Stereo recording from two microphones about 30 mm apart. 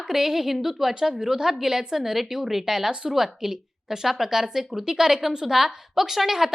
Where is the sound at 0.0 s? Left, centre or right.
Centre.